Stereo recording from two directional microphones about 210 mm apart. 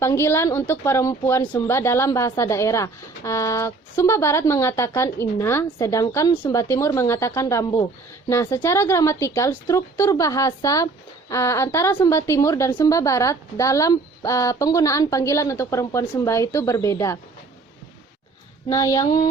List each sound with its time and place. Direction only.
0.0 s speech: 10° left (ahead or behind)
18.7 s speech: 15° left (ahead or behind)